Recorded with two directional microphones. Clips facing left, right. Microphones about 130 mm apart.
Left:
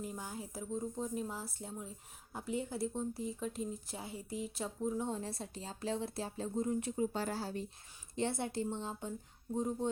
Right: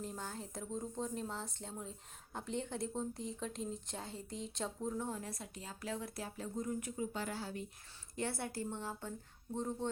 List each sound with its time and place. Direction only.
0.0 s speech: 10° left (ahead or behind)
4.9 s speech: 25° left (ahead or behind)
8.1 s speech: 20° left (ahead or behind)